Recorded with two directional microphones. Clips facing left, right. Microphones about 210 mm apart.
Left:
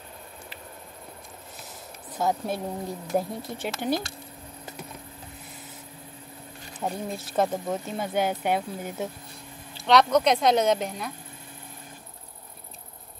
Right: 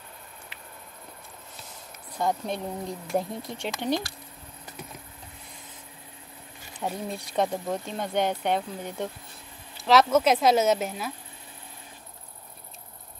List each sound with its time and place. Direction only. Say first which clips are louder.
2.1 s speech: left 1 dB; 5° left (ahead or behind)
6.8 s speech: left 1 dB; 5° left (ahead or behind)